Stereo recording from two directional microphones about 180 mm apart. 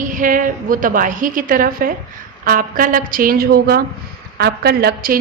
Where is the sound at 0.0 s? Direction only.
45° right (ahead or behind).